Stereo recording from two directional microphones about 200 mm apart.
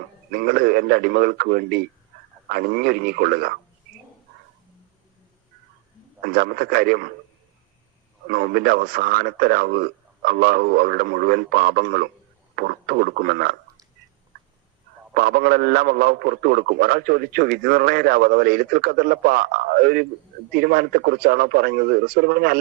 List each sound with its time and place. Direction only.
0.3 s a man's voice: 50° right (ahead or behind)
6.2 s a man's voice: 50° right (ahead or behind)
8.3 s a man's voice: 50° right (ahead or behind)
15.1 s a man's voice: 50° right (ahead or behind)